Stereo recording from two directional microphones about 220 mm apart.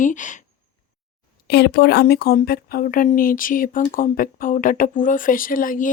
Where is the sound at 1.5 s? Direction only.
50° left (ahead or behind).